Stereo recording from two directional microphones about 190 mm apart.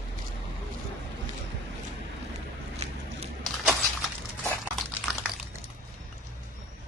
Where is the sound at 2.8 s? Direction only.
35° right (ahead or behind).